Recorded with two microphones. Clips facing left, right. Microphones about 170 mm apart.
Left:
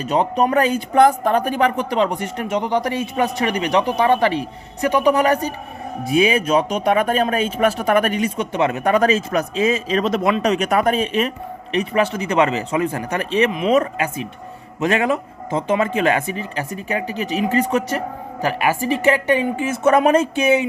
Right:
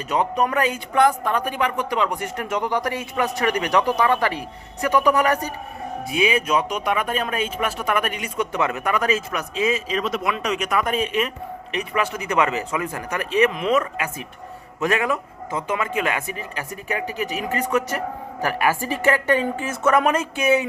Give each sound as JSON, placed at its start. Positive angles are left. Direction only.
{"t": 0.0, "sound": "a man's voice", "side_deg": 30}
{"t": 14.8, "sound": "a man's voice", "side_deg": 25}